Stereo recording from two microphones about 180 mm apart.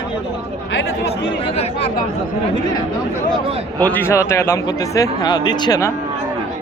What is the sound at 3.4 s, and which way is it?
Speech, 30° right (ahead or behind).